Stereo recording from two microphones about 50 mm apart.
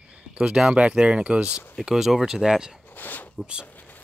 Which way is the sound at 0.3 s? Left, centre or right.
Centre.